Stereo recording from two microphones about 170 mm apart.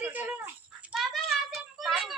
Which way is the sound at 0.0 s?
10° right (ahead or behind).